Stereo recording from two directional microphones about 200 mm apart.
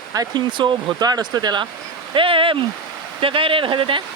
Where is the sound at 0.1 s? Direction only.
20° right (ahead or behind).